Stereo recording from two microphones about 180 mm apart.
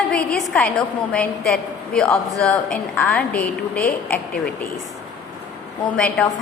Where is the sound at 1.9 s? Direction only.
5° left (ahead or behind).